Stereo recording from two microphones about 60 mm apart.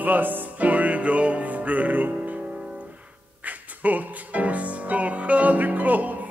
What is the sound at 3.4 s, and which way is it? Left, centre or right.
Speech, right.